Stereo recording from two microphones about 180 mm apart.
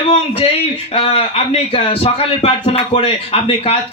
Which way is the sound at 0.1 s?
30° left (ahead or behind).